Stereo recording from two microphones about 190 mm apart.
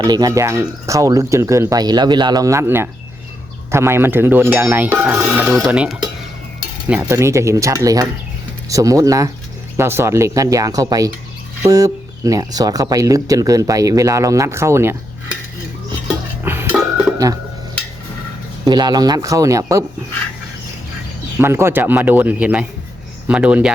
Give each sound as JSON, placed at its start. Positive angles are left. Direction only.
{"t": 0.0, "sound": "speech", "side_deg": -20}
{"t": 5.3, "sound": "mechanisms", "side_deg": -5}
{"t": 6.8, "sound": "speech", "side_deg": -10}
{"t": 16.4, "sound": "dishes", "side_deg": -10}
{"t": 18.6, "sound": "speech", "side_deg": -20}
{"t": 21.3, "sound": "speech", "side_deg": -15}